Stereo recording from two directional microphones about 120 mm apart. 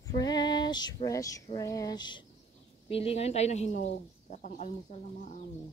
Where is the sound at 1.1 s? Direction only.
30° left (ahead or behind).